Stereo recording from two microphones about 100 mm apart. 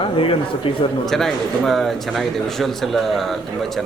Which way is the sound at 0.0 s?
65° left (ahead or behind).